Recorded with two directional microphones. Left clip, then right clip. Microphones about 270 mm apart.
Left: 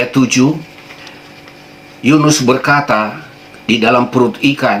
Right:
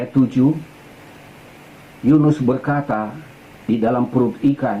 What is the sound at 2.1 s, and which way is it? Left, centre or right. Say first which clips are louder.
Speech: left 6 dB; centre.